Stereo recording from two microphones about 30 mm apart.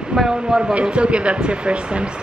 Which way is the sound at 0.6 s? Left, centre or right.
Right.